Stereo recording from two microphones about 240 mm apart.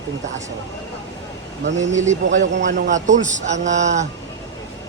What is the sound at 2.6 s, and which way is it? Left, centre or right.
A man's voice, right.